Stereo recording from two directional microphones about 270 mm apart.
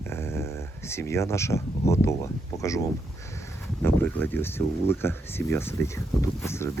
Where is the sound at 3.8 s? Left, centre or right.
Centre.